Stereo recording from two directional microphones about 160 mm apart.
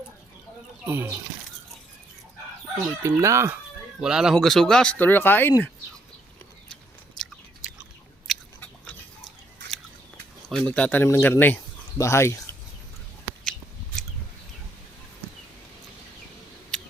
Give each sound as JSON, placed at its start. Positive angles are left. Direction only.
{"t": 0.9, "sound": "chicken", "side_deg": -15}
{"t": 3.0, "sound": "chicken", "side_deg": -20}
{"t": 4.0, "sound": "speech", "side_deg": -5}
{"t": 8.3, "sound": "biting", "side_deg": 0}
{"t": 8.6, "sound": "dog", "side_deg": 5}
{"t": 10.5, "sound": "speech", "side_deg": 5}
{"t": 16.7, "sound": "a sound", "side_deg": 5}